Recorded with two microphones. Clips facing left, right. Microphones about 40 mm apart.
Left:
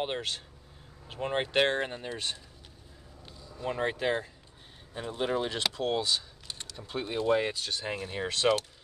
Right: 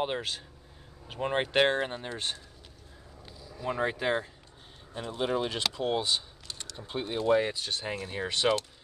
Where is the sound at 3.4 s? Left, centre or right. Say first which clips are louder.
Left 1 dB; centre.